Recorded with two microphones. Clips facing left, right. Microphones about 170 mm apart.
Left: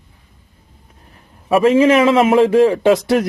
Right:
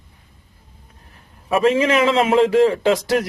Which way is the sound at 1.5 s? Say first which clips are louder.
Left 5 dB; 30° left (ahead or behind).